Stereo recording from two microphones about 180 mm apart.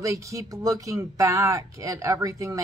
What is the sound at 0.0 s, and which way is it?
Speech, 15° right (ahead or behind).